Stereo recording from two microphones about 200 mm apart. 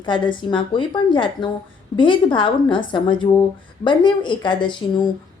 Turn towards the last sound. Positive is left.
turn(degrees=20)  # may be behind; listen again after turning